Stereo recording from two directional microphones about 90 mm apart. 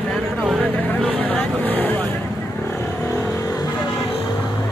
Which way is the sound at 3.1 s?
35° left (ahead or behind).